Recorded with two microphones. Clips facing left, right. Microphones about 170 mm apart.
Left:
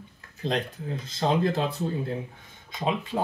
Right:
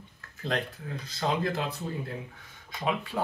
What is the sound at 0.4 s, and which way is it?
Speech, 20° left (ahead or behind).